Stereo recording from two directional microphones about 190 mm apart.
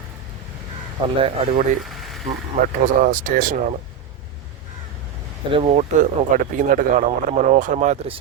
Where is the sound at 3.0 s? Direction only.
45° right (ahead or behind).